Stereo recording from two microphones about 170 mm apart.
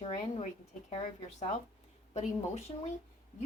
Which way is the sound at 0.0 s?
35° left (ahead or behind).